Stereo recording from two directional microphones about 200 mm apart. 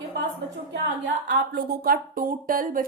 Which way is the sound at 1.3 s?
45° right (ahead or behind).